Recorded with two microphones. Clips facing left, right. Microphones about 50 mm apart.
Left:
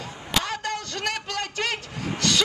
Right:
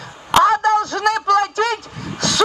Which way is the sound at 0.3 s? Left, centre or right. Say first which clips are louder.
Right 14 dB; right.